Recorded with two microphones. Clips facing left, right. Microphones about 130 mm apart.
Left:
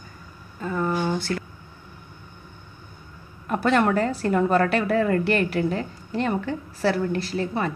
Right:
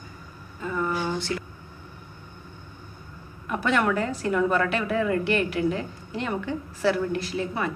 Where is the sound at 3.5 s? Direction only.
35° left (ahead or behind).